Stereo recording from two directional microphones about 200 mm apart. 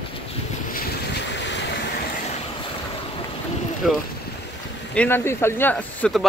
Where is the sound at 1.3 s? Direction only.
60° left (ahead or behind).